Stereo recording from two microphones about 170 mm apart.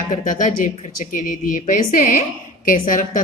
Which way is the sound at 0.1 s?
50° left (ahead or behind).